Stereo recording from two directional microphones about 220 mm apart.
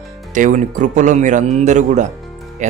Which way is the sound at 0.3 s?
35° right (ahead or behind).